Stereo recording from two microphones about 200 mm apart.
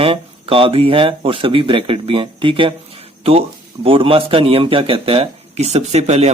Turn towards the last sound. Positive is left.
turn(degrees=-35)  # may be behind; listen again after turning